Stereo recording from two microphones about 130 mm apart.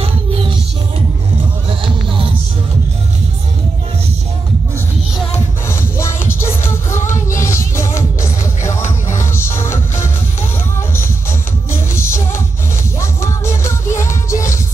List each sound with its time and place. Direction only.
0.0 s music: 45° right (ahead or behind)
1.7 s music: 40° right (ahead or behind)
5.7 s music: 20° left (ahead or behind)
11.7 s music: 20° left (ahead or behind)